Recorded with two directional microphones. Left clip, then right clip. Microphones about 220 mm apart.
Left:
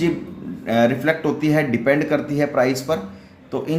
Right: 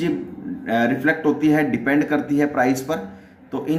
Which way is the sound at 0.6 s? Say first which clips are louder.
Left 2 dB; 30° left (ahead or behind).